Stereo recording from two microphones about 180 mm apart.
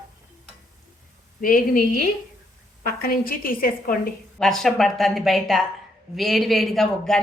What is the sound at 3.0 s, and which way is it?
A woman's voice, 55° left (ahead or behind).